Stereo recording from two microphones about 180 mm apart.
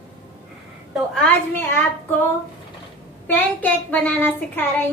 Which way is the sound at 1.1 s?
10° left (ahead or behind).